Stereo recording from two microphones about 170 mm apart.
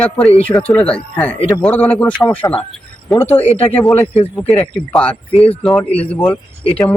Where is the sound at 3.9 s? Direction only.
35° left (ahead or behind).